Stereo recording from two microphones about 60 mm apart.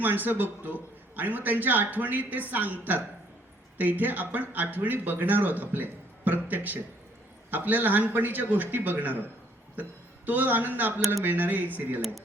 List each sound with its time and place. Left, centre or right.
0.0 s speech: right
10.2 s speech: right